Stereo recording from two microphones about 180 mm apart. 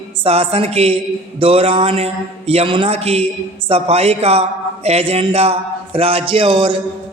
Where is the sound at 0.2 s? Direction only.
35° right (ahead or behind).